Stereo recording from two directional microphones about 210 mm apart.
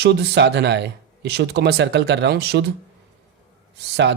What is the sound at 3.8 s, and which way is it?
Speech, 55° right (ahead or behind).